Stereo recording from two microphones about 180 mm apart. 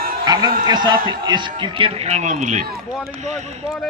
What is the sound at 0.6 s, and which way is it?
A man's voice, 25° right (ahead or behind).